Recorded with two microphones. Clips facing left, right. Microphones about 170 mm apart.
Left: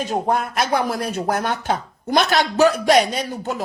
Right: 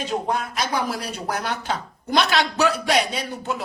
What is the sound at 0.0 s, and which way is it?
Speech, 50° left (ahead or behind).